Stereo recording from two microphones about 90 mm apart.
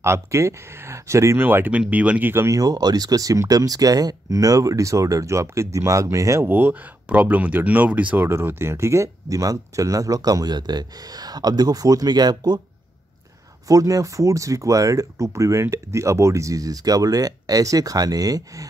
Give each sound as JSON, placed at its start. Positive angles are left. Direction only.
{"t": 0.0, "sound": "speech", "side_deg": -30}
{"t": 2.5, "sound": "speech", "side_deg": -45}
{"t": 6.4, "sound": "speech", "side_deg": -20}
{"t": 13.7, "sound": "speech", "side_deg": -40}